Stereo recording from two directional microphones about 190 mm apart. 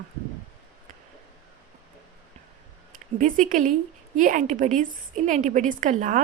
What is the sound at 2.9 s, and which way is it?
A woman's voice, 45° right (ahead or behind).